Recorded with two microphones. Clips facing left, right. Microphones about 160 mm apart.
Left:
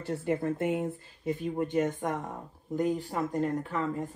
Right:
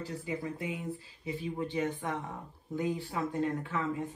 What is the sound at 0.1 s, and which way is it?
Speech, 60° left (ahead or behind).